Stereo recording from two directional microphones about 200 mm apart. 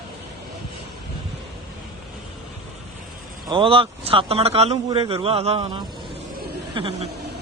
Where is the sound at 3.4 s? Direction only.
25° right (ahead or behind).